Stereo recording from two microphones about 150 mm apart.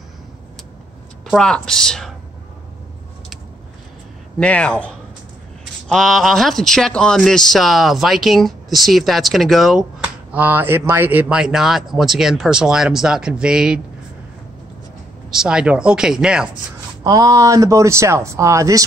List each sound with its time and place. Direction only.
1.3 s speech: 5° left (ahead or behind)
4.4 s speech: 5° left (ahead or behind)
15.3 s speech: 5° right (ahead or behind)
17.0 s speech: 25° right (ahead or behind)